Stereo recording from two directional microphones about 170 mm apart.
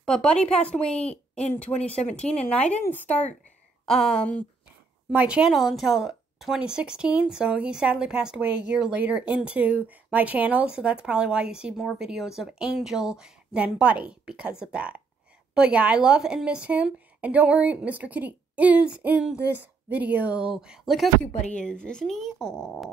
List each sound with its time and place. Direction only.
0.0 s a woman's voice: 5° left (ahead or behind)
5.1 s speech: 5° right (ahead or behind)